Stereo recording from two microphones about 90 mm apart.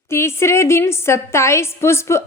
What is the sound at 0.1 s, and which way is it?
A woman's voice, 30° left (ahead or behind).